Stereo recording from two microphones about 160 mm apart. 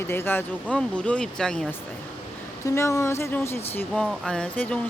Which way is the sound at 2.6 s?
15° left (ahead or behind).